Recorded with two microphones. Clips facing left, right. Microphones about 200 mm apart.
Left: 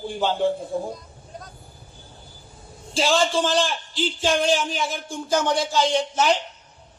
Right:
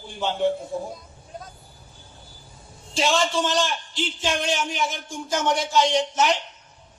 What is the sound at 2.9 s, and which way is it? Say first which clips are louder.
Speech: left 2 dB; 30° left (ahead or behind).